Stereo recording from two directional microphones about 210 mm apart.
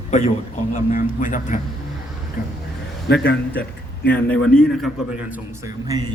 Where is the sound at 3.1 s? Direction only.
50° left (ahead or behind).